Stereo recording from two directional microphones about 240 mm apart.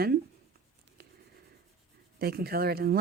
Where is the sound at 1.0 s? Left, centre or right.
Right.